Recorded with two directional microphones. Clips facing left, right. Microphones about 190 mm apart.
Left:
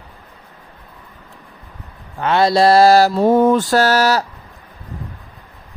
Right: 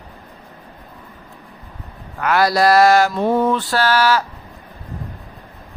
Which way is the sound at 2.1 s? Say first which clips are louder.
Left 2 dB; 25° left (ahead or behind).